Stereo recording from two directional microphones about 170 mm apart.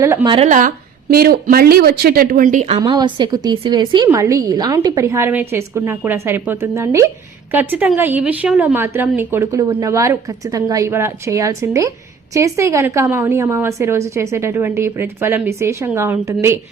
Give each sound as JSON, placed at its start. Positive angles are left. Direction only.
{"t": 0.0, "sound": "a woman's voice", "side_deg": -15}
{"t": 0.4, "sound": "speech", "side_deg": -50}
{"t": 1.1, "sound": "speech", "side_deg": -60}
{"t": 2.7, "sound": "a woman's voice", "side_deg": -25}